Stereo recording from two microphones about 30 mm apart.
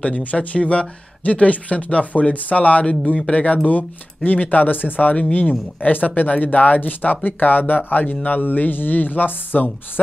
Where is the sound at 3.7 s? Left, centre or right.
Left.